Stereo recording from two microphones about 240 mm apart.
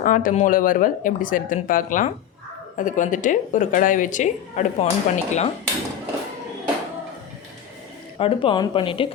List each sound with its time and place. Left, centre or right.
0.0 s a woman's voice: left
8.2 s speech: left